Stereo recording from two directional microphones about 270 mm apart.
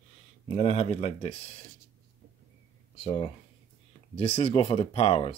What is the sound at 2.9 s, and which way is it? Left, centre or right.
Speech, left.